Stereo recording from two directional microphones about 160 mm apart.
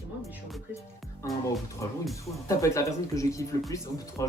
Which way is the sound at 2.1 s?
20° left (ahead or behind).